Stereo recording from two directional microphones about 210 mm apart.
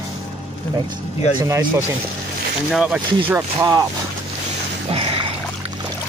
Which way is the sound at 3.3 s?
15° right (ahead or behind).